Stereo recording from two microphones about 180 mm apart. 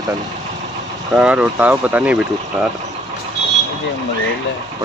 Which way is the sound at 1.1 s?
5° right (ahead or behind).